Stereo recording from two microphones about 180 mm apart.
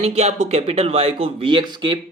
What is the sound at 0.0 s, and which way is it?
Speech, 35° right (ahead or behind).